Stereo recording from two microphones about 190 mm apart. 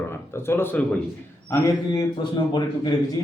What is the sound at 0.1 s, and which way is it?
A man's voice, 10° left (ahead or behind).